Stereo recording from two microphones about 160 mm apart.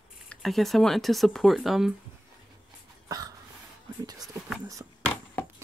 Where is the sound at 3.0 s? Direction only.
25° right (ahead or behind).